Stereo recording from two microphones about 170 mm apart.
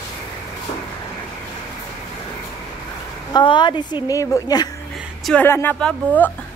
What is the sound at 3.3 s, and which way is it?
A woman's voice, 25° left (ahead or behind).